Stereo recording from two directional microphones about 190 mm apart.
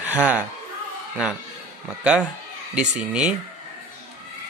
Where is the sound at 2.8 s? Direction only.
5° right (ahead or behind).